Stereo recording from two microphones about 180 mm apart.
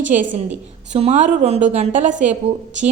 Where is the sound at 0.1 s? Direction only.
45° right (ahead or behind).